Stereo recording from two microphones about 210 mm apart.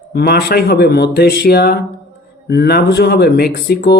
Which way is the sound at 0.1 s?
50° left (ahead or behind).